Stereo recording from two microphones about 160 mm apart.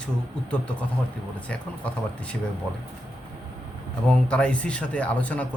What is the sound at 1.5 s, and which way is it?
Speech, 10° left (ahead or behind).